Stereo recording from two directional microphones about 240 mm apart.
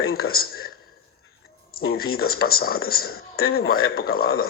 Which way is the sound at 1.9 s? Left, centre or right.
Left.